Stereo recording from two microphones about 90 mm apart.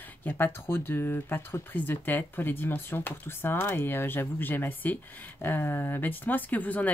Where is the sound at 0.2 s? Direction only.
25° left (ahead or behind).